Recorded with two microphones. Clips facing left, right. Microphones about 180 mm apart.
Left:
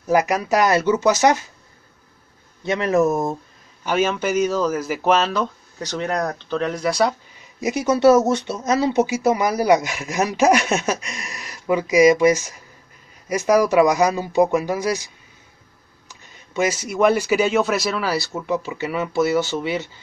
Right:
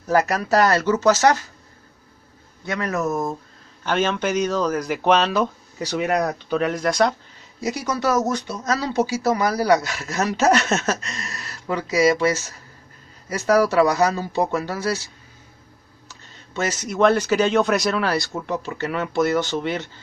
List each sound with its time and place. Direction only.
0.1 s speech: 15° left (ahead or behind)
2.6 s speech: 25° left (ahead or behind)
3.8 s speech: 10° left (ahead or behind)
5.4 s speech: 10° right (ahead or behind)
7.6 s speech: 20° left (ahead or behind)
16.1 s speech: 10° left (ahead or behind)